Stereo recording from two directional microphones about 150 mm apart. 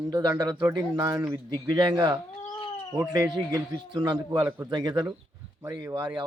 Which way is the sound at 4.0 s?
25° right (ahead or behind).